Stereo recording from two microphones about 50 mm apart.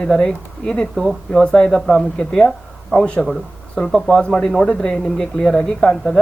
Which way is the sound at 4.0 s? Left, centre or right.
Centre.